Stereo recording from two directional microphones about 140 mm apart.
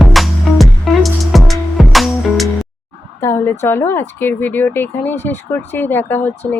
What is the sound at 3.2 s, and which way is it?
Speech, 15° left (ahead or behind).